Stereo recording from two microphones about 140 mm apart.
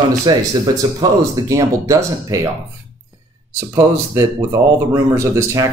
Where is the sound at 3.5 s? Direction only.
25° right (ahead or behind).